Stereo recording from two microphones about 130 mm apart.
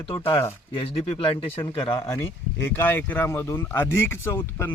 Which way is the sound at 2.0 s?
20° left (ahead or behind).